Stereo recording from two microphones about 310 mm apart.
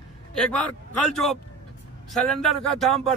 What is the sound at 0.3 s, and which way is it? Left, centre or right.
A man's voice, centre.